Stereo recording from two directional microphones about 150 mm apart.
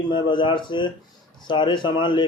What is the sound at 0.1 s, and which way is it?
Speech, 30° left (ahead or behind).